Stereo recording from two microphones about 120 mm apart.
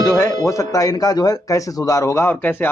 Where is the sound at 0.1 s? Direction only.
25° left (ahead or behind).